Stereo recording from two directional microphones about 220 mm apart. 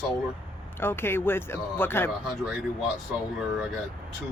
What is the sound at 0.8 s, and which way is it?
Speech, 10° left (ahead or behind).